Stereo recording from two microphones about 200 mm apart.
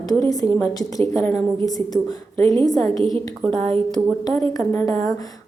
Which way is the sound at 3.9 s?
5° left (ahead or behind).